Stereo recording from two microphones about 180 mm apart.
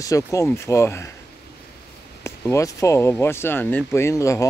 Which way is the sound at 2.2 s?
15° left (ahead or behind).